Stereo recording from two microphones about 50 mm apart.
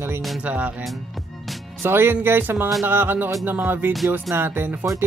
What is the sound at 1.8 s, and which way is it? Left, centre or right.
Speech, right.